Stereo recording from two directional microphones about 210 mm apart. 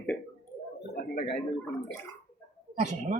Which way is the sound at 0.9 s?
45° left (ahead or behind).